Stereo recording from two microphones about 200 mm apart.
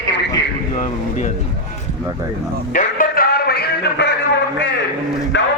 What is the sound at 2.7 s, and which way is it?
Music, 45° left (ahead or behind).